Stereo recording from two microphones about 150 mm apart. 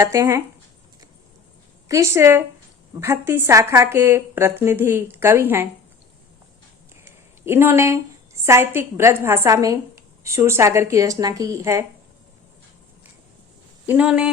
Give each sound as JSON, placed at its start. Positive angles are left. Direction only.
{"t": 0.0, "sound": "speech", "side_deg": -20}
{"t": 1.9, "sound": "a woman's voice", "side_deg": -20}
{"t": 7.0, "sound": "a woman's voice", "side_deg": -15}
{"t": 13.8, "sound": "a woman's voice", "side_deg": -10}